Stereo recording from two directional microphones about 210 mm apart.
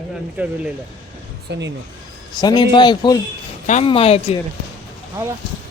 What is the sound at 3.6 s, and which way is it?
Speech, 30° left (ahead or behind).